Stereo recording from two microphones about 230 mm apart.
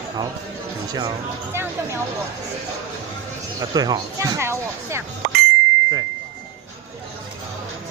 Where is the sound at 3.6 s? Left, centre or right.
Centre.